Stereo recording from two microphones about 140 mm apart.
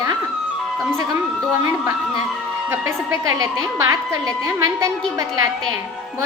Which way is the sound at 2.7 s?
20° right (ahead or behind).